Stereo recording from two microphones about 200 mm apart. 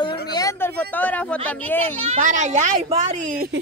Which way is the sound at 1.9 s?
30° right (ahead or behind).